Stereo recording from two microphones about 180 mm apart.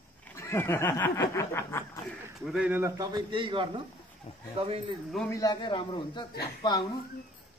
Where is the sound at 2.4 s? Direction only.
5° right (ahead or behind); by 3.7 s 25° right (ahead or behind).